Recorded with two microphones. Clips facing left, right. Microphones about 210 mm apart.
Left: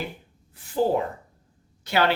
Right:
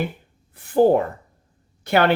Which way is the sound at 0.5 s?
55° right (ahead or behind).